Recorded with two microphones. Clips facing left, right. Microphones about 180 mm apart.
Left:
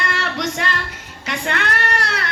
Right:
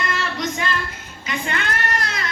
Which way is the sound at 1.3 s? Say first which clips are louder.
Left 2 dB; 75° left (ahead or behind).